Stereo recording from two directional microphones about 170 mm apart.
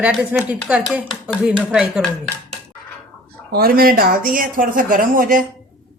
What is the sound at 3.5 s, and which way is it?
Speech, 60° right (ahead or behind).